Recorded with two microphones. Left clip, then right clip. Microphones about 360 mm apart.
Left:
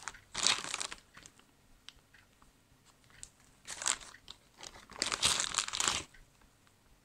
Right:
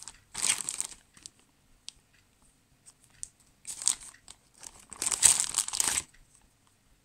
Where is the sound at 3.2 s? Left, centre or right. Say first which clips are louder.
Right 8 dB; right.